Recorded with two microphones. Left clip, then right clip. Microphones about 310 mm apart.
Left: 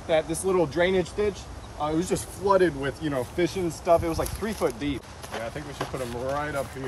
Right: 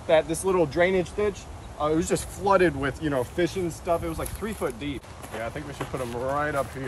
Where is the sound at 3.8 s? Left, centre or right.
Left.